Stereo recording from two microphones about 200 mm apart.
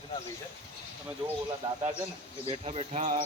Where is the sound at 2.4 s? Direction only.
30° right (ahead or behind).